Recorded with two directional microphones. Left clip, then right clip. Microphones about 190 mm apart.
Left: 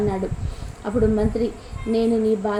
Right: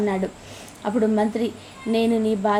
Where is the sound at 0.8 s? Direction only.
20° right (ahead or behind).